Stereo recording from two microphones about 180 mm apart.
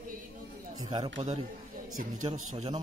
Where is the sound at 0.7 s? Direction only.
20° right (ahead or behind).